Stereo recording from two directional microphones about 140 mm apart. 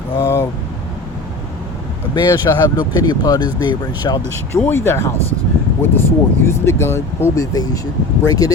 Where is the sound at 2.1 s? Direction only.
30° left (ahead or behind).